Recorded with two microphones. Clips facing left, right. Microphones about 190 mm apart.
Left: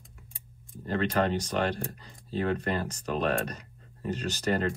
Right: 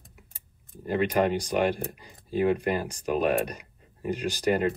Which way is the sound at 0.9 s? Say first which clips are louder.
Right 3 dB; 10° right (ahead or behind).